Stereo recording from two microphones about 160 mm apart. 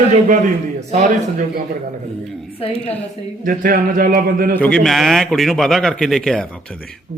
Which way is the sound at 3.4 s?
60° right (ahead or behind).